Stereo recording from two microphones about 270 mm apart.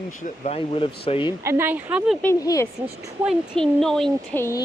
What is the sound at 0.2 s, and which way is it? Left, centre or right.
Speech, left.